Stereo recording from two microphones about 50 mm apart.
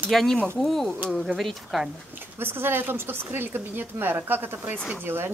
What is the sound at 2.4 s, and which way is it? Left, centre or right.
Speech, right.